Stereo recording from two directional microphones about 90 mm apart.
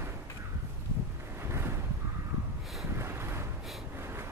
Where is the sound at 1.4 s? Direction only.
30° right (ahead or behind).